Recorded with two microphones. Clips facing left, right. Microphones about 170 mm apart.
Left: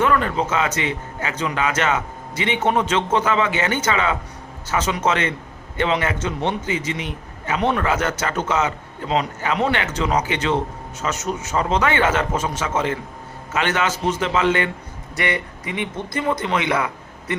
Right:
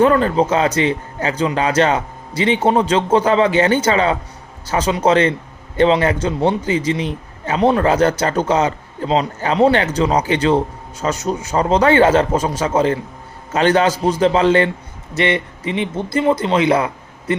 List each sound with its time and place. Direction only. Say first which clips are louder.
0.0 s a man's voice: right 6 dB; 35° right (ahead or behind)